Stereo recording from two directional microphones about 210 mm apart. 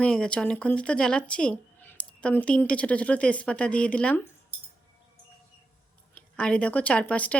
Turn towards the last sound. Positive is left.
turn(degrees=5)  # may be behind; listen again after turning